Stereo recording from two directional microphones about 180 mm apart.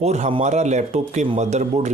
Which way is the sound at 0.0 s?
35° right (ahead or behind).